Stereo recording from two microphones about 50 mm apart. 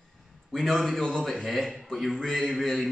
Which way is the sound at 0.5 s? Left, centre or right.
Centre.